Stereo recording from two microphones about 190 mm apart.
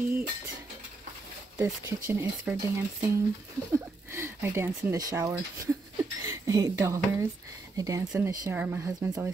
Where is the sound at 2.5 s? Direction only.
5° right (ahead or behind).